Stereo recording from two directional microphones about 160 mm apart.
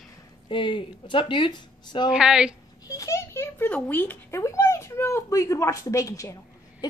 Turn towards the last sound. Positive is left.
turn(degrees=20)  # may be behind; listen again after turning